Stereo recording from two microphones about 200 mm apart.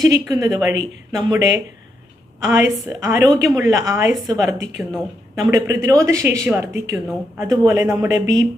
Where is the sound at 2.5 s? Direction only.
15° right (ahead or behind).